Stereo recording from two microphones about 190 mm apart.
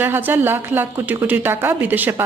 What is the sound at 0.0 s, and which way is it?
Speech, 10° right (ahead or behind).